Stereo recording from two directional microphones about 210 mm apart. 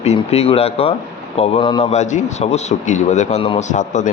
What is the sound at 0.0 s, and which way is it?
Speech, 30° left (ahead or behind).